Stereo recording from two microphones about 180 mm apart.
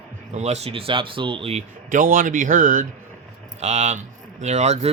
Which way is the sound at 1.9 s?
50° right (ahead or behind).